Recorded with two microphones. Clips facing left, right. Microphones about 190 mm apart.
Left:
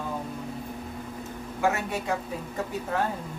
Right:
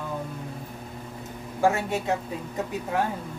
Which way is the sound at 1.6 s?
25° right (ahead or behind).